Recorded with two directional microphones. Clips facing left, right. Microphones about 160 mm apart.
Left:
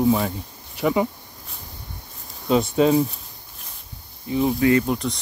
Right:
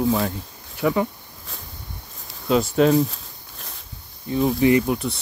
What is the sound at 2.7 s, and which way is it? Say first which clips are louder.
Speech: right 1 dB; 5° left (ahead or behind).